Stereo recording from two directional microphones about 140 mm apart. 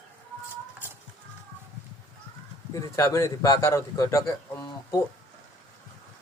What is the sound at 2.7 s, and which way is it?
A man's voice, 20° left (ahead or behind).